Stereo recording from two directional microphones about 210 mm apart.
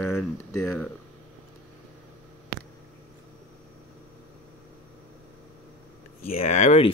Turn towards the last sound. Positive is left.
turn(degrees=35)  # may be behind; listen again after turning